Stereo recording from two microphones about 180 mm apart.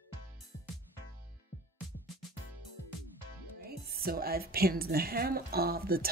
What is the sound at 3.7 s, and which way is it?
Speech, 60° right (ahead or behind).